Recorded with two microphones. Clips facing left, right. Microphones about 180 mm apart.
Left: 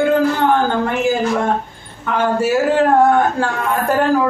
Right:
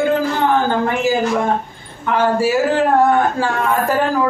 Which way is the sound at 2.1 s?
Centre (ahead or behind).